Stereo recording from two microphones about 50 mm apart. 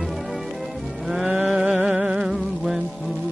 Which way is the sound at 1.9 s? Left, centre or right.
Centre.